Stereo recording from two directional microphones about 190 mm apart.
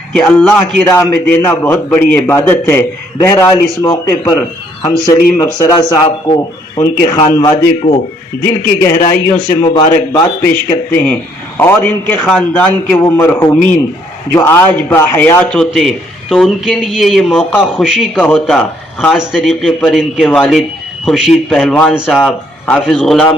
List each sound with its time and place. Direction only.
0.1 s a man's voice: 5° left (ahead or behind)